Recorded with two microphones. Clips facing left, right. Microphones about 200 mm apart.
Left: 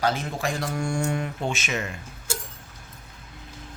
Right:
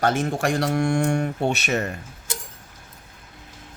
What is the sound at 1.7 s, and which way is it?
Speech, 40° right (ahead or behind).